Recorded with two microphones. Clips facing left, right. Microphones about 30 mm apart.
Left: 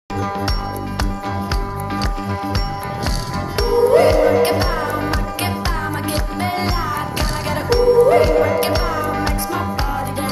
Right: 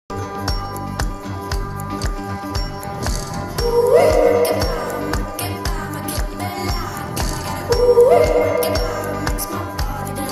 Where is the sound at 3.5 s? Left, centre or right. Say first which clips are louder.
Even; left.